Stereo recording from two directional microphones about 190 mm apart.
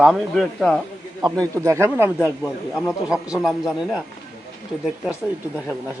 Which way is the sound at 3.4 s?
Centre (ahead or behind).